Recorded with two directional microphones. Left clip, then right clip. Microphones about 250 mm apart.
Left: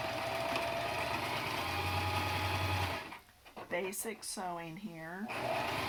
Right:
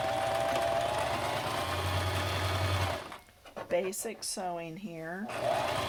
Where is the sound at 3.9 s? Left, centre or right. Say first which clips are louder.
Right 4 dB; right.